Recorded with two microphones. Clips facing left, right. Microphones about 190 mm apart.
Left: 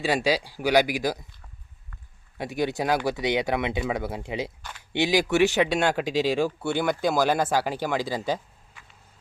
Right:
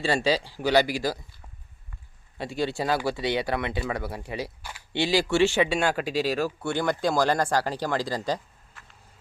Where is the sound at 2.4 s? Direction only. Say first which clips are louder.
Left 1 dB; 15° left (ahead or behind).